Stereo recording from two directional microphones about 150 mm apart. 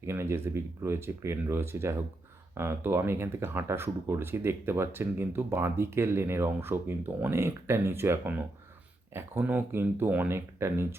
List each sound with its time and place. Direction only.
0.0 s speech: 15° right (ahead or behind)